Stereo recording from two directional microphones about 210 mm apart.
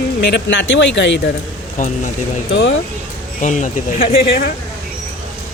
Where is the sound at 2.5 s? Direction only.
60° left (ahead or behind).